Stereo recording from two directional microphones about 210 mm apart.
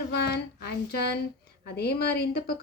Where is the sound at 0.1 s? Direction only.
50° left (ahead or behind).